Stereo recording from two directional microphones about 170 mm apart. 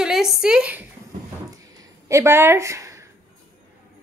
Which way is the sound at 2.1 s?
15° right (ahead or behind).